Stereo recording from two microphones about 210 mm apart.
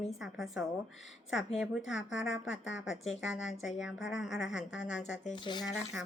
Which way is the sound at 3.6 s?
Centre (ahead or behind).